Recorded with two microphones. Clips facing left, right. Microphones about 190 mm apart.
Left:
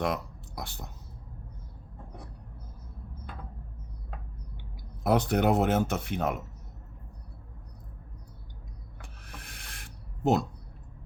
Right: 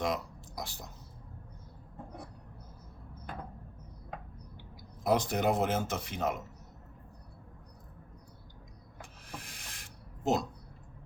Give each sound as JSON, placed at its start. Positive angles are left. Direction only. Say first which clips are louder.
{"t": 0.0, "sound": "speech", "louder": "left 3 dB", "side_deg": 60}
{"t": 5.0, "sound": "speech", "louder": "left 4 dB", "side_deg": 60}
{"t": 9.2, "sound": "a sound", "louder": "right 2 dB", "side_deg": 60}